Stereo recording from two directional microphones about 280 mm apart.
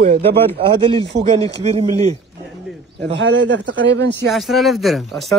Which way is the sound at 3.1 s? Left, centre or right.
Right.